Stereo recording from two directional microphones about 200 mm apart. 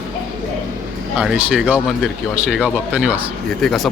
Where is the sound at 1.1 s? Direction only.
5° right (ahead or behind).